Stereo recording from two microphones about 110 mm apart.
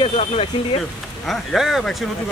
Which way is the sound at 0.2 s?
70° left (ahead or behind).